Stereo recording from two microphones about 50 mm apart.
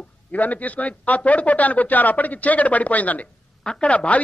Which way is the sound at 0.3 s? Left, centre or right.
Left.